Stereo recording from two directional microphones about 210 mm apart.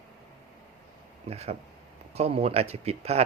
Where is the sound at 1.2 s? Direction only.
30° right (ahead or behind).